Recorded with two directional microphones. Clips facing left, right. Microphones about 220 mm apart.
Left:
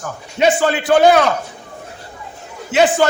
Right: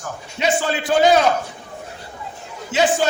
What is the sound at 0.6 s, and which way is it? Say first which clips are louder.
Speech: left 3 dB; 60° left (ahead or behind).